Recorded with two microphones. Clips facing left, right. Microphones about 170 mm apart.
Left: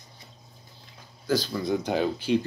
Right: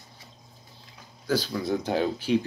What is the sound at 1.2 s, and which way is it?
Speech, 5° right (ahead or behind).